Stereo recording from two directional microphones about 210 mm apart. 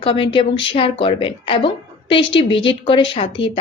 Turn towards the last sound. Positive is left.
turn(degrees=25)  # may be behind; listen again after turning